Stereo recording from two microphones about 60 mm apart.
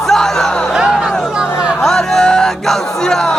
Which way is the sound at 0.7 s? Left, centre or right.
Centre.